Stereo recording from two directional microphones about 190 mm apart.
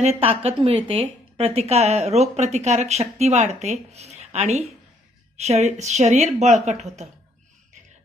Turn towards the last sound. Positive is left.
turn(degrees=-35)  # may be behind; listen again after turning